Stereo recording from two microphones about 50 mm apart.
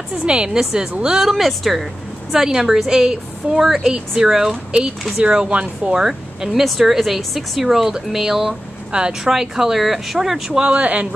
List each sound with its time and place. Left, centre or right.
0.2 s speech: centre
1.2 s speech: centre
6.0 s speech: centre
8.9 s speech: centre
9.3 s speech: centre; by 11.1 s right